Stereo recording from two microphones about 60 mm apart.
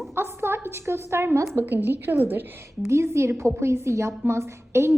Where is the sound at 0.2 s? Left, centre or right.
Right.